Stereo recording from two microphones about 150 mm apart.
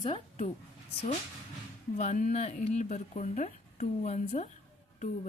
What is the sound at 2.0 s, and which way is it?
Speech, 55° left (ahead or behind).